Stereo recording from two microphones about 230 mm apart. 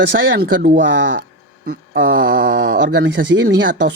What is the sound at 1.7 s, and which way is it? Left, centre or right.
Speech, right.